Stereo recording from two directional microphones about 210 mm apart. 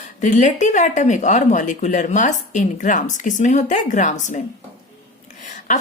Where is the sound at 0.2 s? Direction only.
35° left (ahead or behind).